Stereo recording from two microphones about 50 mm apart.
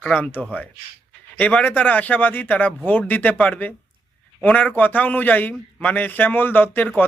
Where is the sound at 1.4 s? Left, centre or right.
Left.